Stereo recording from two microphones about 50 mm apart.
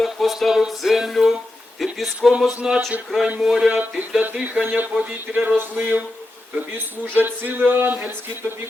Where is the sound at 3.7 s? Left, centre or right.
Right.